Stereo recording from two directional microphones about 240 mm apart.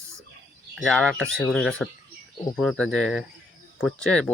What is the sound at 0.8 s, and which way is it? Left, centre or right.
Speech, centre.